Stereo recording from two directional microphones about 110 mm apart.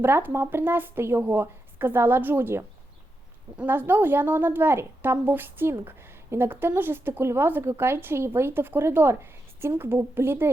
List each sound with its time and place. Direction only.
0.0 s a woman's voice: 20° right (ahead or behind)